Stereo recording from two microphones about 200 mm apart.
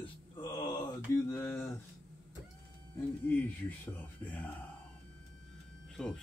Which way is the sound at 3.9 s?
10° left (ahead or behind).